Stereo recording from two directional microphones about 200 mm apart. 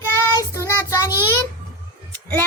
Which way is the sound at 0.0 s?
15° left (ahead or behind).